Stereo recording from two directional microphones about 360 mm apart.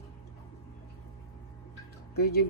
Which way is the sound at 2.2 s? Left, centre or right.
Left.